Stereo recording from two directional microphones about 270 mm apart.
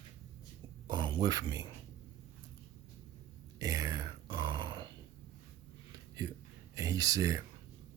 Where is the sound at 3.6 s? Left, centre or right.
Centre.